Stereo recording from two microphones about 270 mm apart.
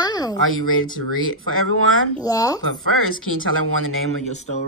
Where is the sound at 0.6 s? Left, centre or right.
Left.